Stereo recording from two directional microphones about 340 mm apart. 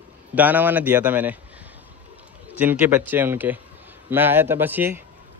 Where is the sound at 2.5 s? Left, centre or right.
Centre.